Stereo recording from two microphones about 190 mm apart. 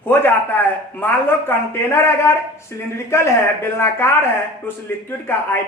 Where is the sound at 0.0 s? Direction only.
10° left (ahead or behind).